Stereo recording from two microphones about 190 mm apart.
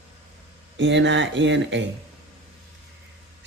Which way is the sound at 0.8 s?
70° right (ahead or behind).